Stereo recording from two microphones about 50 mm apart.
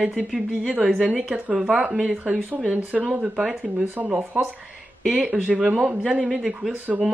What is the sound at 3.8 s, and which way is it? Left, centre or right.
Speech, right.